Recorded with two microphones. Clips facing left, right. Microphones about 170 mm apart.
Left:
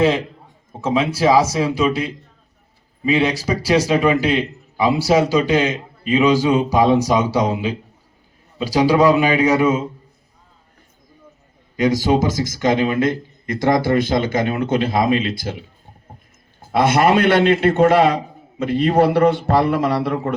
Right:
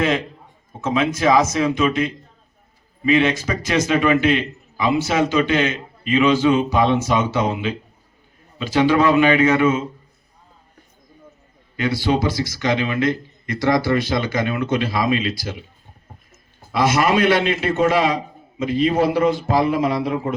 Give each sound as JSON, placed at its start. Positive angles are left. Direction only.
{"t": 0.8, "sound": "a man's voice", "side_deg": 30}
{"t": 5.3, "sound": "a man's voice", "side_deg": 35}
{"t": 8.6, "sound": "a man's voice", "side_deg": 35}
{"t": 11.9, "sound": "speech", "side_deg": 45}
{"t": 16.6, "sound": "a man's voice", "side_deg": 55}